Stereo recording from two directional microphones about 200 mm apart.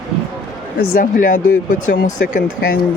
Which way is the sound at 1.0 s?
40° left (ahead or behind).